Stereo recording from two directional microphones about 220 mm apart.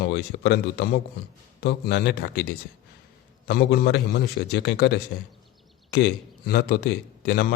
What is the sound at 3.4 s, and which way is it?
A man's voice, 45° left (ahead or behind).